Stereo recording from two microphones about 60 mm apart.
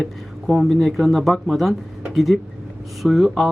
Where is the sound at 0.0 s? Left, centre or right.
Centre.